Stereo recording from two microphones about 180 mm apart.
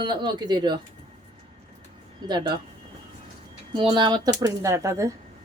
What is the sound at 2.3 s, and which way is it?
Speech, 25° right (ahead or behind).